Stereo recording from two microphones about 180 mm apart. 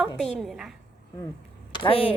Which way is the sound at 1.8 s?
30° left (ahead or behind).